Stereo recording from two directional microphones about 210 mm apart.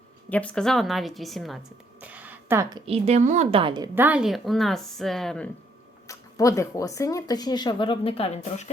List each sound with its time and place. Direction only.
0.3 s a woman's voice: 5° left (ahead or behind); by 3.8 s 25° right (ahead or behind)
3.9 s a woman's voice: 5° right (ahead or behind)
6.1 s speech: 15° left (ahead or behind); by 8.7 s 30° left (ahead or behind)